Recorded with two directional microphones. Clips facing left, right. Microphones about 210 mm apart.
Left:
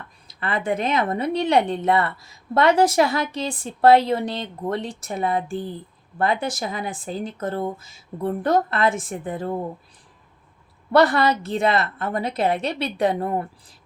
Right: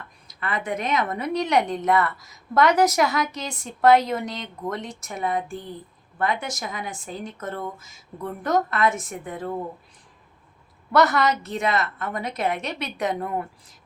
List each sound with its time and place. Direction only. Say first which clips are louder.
0.3 s speech: left 4 dB; 30° left (ahead or behind)
10.9 s speech: left 3 dB; 30° left (ahead or behind)